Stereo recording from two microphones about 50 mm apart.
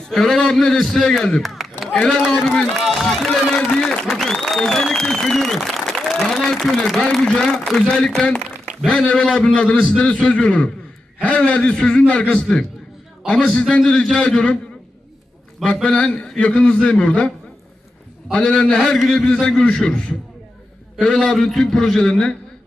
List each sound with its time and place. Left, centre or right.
0.0 s speech: centre
1.5 s a sound: centre
2.0 s a man's voice: centre
2.8 s speech: centre
3.7 s applause: centre
4.1 s a man's voice: centre; by 14.6 s left
15.6 s a man's voice: centre
18.3 s speech: centre
19.1 s a man's voice: centre
19.7 s speech: centre